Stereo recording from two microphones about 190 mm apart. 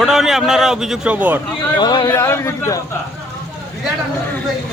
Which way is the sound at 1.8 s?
25° left (ahead or behind).